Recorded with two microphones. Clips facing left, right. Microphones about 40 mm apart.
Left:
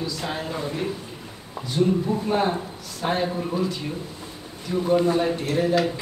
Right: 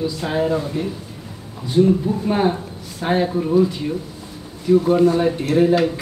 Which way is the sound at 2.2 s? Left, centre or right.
Centre.